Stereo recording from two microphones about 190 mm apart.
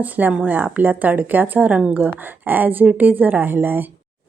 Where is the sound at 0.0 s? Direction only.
10° right (ahead or behind).